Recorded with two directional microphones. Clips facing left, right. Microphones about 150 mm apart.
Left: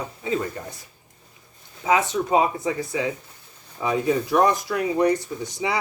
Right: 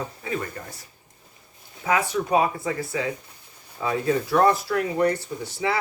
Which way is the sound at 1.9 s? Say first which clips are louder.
Left 2 dB; 20° left (ahead or behind).